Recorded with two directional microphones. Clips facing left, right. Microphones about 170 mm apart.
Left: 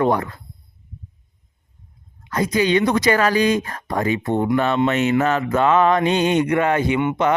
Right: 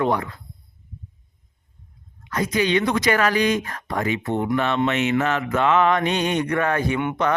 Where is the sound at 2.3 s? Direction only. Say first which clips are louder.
Left 3 dB; 30° left (ahead or behind).